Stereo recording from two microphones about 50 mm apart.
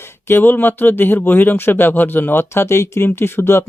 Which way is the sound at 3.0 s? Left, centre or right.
Left.